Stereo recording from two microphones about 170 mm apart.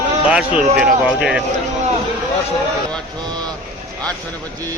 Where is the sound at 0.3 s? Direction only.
5° right (ahead or behind).